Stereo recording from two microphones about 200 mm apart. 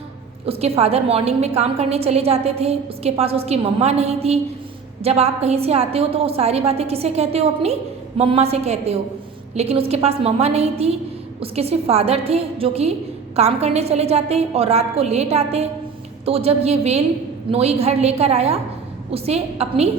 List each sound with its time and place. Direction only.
0.4 s a woman's voice: 30° right (ahead or behind)